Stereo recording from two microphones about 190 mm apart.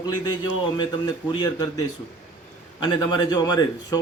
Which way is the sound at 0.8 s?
25° left (ahead or behind).